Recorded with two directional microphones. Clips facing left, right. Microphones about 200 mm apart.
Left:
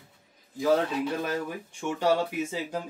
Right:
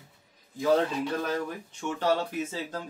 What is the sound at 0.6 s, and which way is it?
Speech, 5° left (ahead or behind).